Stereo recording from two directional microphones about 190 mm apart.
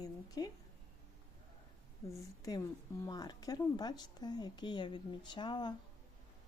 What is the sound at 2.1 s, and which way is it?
A woman's voice, 15° left (ahead or behind).